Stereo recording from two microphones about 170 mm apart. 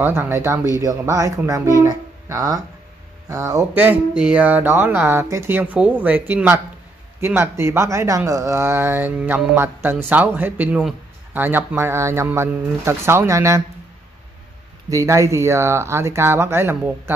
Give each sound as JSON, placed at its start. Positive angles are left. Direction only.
{"t": 0.0, "sound": "speech", "side_deg": -15}
{"t": 14.9, "sound": "speech", "side_deg": -20}